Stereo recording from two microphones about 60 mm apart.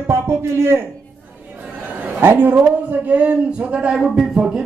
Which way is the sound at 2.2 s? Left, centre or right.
Right.